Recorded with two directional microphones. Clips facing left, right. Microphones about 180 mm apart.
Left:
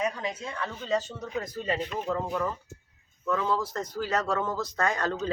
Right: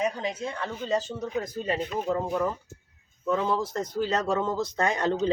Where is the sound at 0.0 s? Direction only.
30° right (ahead or behind).